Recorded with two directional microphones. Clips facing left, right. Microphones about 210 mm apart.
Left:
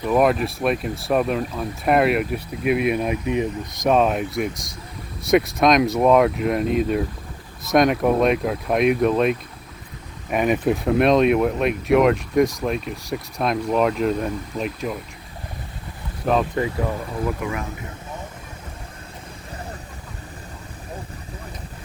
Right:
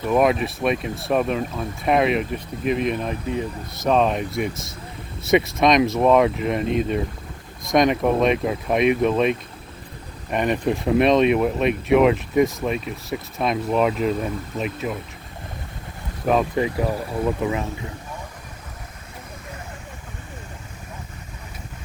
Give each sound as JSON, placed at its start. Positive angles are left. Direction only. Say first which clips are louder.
{"t": 0.0, "sound": "speech", "louder": "even", "side_deg": 0}
{"t": 17.2, "sound": "speech", "louder": "right 4 dB", "side_deg": -20}